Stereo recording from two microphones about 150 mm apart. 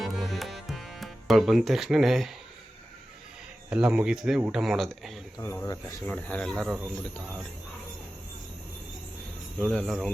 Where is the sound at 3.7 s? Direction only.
5° right (ahead or behind).